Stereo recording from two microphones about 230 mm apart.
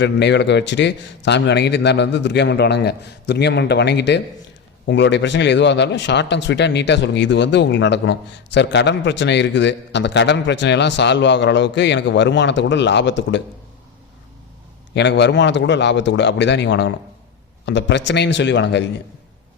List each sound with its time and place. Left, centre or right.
0.0 s speech: left
14.9 s speech: left